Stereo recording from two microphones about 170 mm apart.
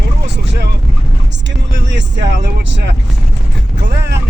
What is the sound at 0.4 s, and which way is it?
Boat, 85° right.